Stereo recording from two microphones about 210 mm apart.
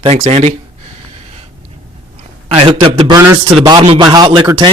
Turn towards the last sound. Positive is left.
turn(degrees=-20)  # may be behind; listen again after turning